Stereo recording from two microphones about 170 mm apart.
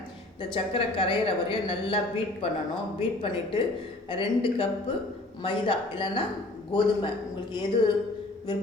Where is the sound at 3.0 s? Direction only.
30° left (ahead or behind).